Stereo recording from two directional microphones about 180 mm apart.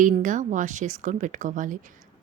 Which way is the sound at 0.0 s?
45° right (ahead or behind).